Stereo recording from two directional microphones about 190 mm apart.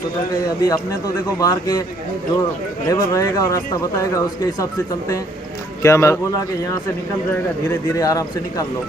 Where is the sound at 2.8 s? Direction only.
15° left (ahead or behind).